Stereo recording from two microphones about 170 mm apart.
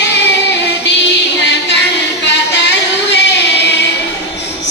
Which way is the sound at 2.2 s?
90° left.